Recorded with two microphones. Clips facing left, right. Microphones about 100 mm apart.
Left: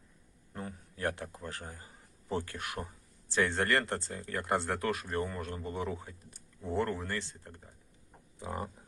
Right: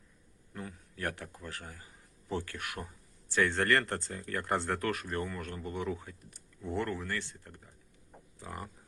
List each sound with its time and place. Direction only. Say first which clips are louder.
0.5 s a man's voice: left 1 dB; 30° left (ahead or behind)